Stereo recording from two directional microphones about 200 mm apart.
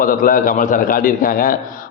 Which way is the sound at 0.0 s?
45° left (ahead or behind).